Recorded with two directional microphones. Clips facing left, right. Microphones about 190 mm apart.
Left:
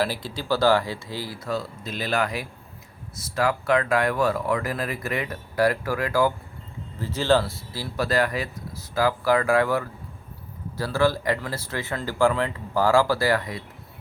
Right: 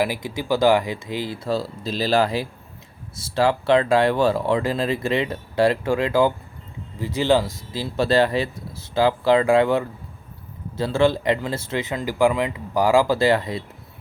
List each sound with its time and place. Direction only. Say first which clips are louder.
0.0 s speech: right 3 dB; 15° right (ahead or behind)
1.5 s speech: right 4 dB; 30° right (ahead or behind)